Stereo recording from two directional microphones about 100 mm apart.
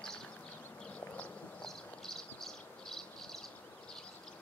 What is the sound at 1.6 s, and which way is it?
Insect, 5° left (ahead or behind).